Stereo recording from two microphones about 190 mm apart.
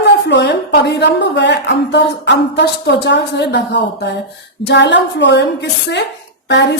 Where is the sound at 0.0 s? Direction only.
65° left (ahead or behind).